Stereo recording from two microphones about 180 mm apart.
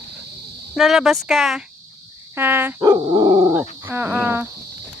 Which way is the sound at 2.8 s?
25° right (ahead or behind).